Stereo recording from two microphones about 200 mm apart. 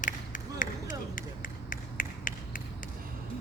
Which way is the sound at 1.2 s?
45° left (ahead or behind).